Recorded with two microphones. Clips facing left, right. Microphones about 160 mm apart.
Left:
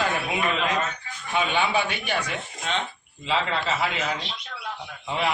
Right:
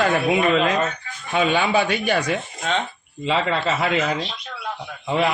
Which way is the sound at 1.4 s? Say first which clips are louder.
Right 5 dB; 45° right (ahead or behind).